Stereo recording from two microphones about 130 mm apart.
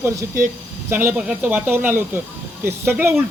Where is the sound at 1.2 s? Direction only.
5° right (ahead or behind).